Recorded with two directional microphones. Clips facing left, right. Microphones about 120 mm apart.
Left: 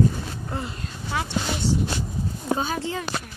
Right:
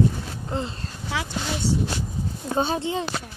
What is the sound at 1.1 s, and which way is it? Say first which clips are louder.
Speech: left 1 dB; 90° right.